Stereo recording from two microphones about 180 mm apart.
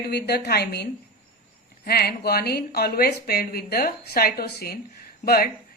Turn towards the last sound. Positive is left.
turn(degrees=55)  # may be behind; listen again after turning